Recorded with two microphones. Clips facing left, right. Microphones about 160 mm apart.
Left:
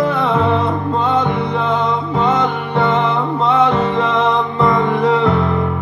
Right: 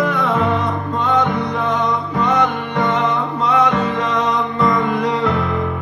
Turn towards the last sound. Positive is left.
turn(degrees=25)  # may be behind; listen again after turning